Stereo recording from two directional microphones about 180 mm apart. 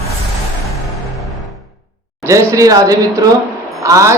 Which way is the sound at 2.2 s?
15° right (ahead or behind).